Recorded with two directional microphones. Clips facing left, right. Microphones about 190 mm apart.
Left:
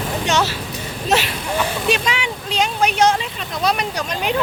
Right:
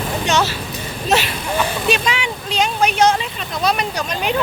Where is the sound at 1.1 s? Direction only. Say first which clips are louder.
Right 1 dB; 10° left (ahead or behind).